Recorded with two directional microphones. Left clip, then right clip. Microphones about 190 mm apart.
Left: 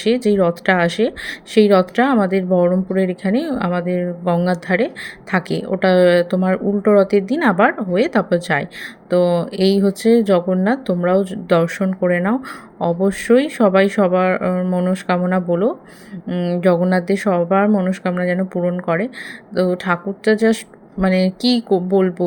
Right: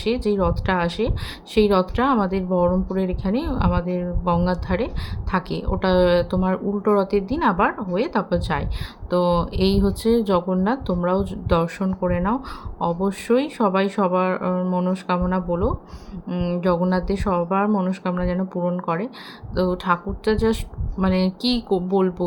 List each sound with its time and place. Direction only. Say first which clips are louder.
0.0 s a woman's voice: left 6 dB; 15° left (ahead or behind)